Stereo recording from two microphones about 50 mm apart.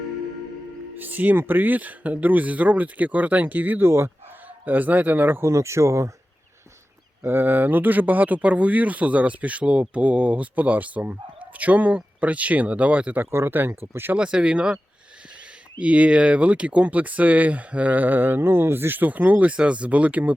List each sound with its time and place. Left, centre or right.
0.9 s speech: right
3.8 s speech: right
4.6 s speech: right
5.4 s speech: right
7.3 s speech: right
13.5 s speech: right
14.2 s speech: centre
15.8 s speech: right